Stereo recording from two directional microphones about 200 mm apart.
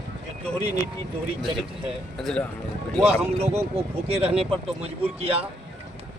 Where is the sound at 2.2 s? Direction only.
5° left (ahead or behind).